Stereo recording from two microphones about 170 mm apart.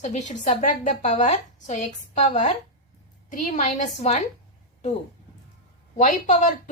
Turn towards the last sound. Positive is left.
turn(degrees=45)  # may be behind; listen again after turning